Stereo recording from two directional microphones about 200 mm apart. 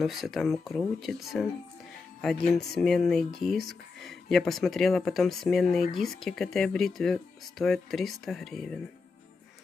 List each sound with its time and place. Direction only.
0.0 s speech: centre (ahead or behind)
2.5 s speech: centre (ahead or behind)